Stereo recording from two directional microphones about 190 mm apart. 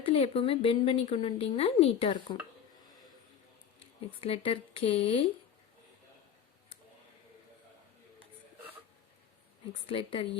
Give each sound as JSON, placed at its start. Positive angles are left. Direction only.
{"t": 0.0, "sound": "a woman's voice", "side_deg": 30}
{"t": 4.2, "sound": "a woman's voice", "side_deg": 30}
{"t": 9.8, "sound": "a woman's voice", "side_deg": 30}